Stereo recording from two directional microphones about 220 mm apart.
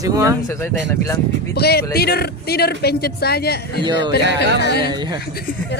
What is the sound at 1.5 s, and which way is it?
Speech, 45° left (ahead or behind).